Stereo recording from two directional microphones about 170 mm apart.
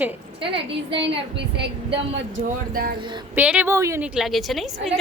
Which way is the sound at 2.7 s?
60° right (ahead or behind).